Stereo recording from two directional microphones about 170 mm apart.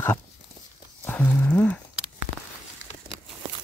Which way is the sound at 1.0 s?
10° left (ahead or behind).